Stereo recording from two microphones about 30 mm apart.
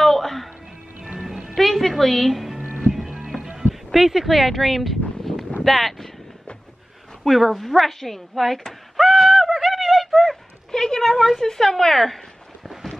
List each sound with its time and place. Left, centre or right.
0.0 s music: centre
1.5 s a woman's voice: centre
2.6 s music: right
3.5 s speech: centre
5.2 s a sound: centre
5.6 s speech: centre
7.2 s a woman's voice: centre
8.6 s a sound: centre
10.2 s a sound: centre
11.4 s a woman's voice: centre